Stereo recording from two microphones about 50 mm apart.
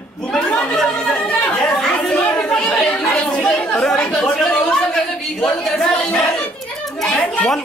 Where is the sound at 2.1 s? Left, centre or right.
Left.